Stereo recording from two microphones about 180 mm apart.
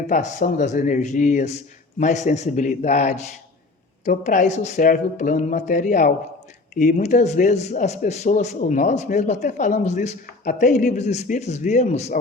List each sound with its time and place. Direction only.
0.1 s speech: 40° left (ahead or behind)